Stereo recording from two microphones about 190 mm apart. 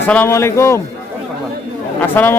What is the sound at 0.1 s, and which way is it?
Speech, 10° left (ahead or behind).